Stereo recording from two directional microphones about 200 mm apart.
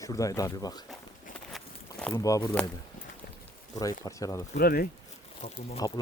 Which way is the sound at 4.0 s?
15° left (ahead or behind).